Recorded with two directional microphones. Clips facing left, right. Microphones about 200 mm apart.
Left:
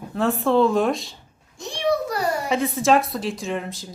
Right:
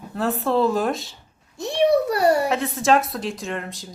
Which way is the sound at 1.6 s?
65° right (ahead or behind).